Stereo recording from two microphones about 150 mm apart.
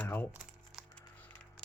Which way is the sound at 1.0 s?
10° left (ahead or behind).